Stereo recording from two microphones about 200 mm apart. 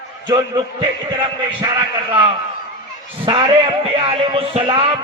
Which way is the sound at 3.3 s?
25° right (ahead or behind).